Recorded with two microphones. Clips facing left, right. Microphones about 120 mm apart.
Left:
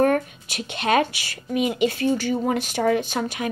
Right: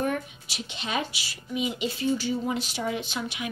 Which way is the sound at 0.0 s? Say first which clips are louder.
Left 9 dB; 55° left (ahead or behind).